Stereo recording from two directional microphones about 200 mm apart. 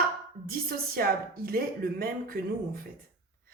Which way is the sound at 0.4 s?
50° right (ahead or behind).